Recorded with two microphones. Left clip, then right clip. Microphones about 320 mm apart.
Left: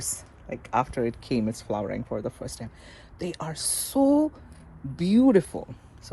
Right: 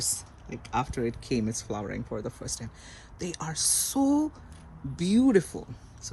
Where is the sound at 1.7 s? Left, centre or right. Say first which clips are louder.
Left 8 dB; left.